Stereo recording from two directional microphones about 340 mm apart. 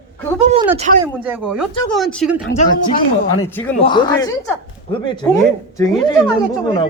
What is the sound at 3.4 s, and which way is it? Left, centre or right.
Speech, centre.